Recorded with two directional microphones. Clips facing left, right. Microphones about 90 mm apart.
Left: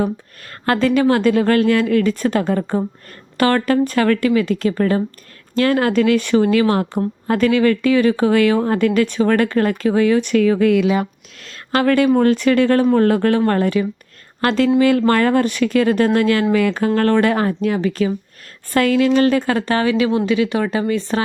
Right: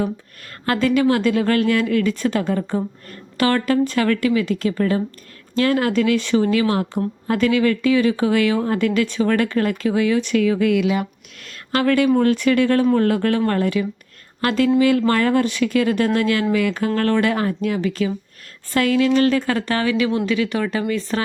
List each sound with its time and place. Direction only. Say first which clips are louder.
0.0 s speech: left 3 dB; 45° left (ahead or behind)
19.0 s speech: left 2 dB; 30° left (ahead or behind)